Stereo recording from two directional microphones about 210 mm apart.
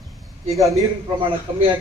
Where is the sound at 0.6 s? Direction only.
Centre (ahead or behind).